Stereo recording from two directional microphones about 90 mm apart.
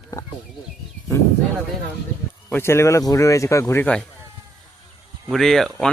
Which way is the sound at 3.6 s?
25° left (ahead or behind).